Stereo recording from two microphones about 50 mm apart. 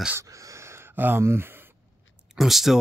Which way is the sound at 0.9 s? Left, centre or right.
Right.